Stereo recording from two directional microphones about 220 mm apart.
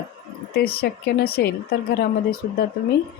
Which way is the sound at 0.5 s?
45° left (ahead or behind).